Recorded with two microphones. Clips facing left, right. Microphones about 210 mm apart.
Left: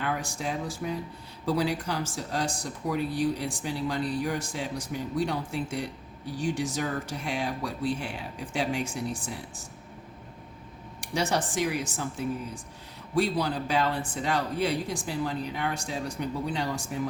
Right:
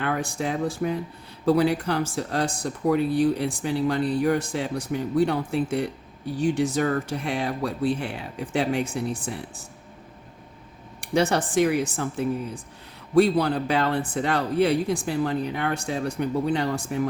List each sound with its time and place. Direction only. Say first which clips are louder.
0.0 s speech: right 5 dB; 60° right (ahead or behind)
11.0 s speech: right 6 dB; 60° right (ahead or behind)